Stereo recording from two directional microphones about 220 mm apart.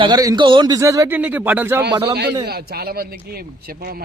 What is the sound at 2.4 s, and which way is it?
Speech, 45° right (ahead or behind).